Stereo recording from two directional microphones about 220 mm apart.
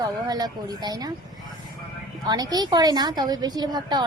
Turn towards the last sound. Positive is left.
turn(degrees=-20)  # may be behind; listen again after turning